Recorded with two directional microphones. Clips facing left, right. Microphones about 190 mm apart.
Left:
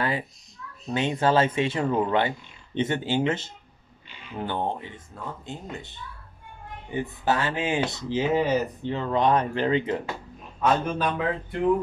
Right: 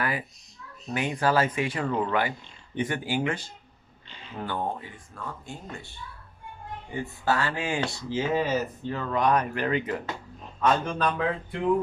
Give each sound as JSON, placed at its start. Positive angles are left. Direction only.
{"t": 0.9, "sound": "speech", "side_deg": 25}
{"t": 10.6, "sound": "a man's voice", "side_deg": 5}
{"t": 11.1, "sound": "a sound", "side_deg": 0}